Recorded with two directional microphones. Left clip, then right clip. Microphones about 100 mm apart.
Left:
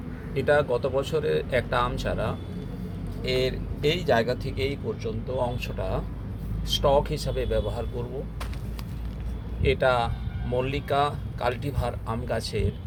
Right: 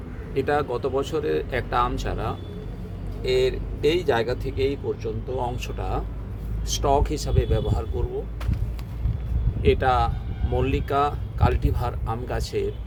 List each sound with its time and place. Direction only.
0.3 s speech: 30° right (ahead or behind)
9.6 s speech: 35° right (ahead or behind)